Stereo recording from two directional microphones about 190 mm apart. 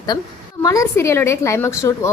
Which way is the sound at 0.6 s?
15° left (ahead or behind).